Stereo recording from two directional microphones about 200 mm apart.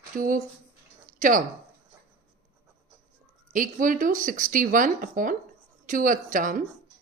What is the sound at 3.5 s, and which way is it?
Speech, 40° right (ahead or behind).